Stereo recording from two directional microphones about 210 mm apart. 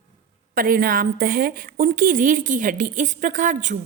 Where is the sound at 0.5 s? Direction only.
45° right (ahead or behind).